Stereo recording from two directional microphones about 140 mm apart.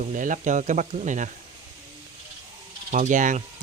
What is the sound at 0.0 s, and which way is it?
Speech, 70° right (ahead or behind).